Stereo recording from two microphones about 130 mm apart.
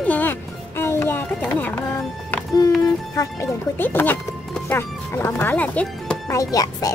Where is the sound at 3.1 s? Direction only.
20° left (ahead or behind).